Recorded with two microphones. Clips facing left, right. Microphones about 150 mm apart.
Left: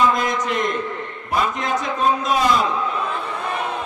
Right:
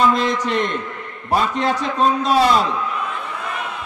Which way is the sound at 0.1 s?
30° right (ahead or behind).